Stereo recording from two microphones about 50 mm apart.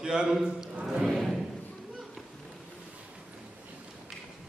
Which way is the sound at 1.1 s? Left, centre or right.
Centre.